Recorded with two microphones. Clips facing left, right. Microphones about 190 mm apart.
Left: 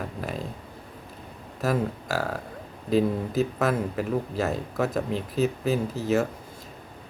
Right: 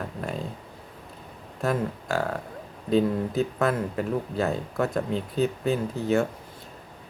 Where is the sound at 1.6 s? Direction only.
5° left (ahead or behind).